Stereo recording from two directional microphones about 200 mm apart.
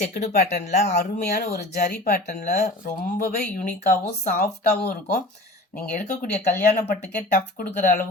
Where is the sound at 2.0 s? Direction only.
45° left (ahead or behind).